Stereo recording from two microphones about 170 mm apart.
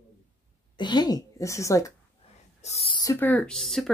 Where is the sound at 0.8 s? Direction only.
25° left (ahead or behind).